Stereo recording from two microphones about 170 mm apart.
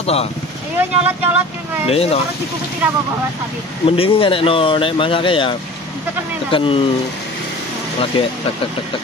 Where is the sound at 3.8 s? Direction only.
35° left (ahead or behind).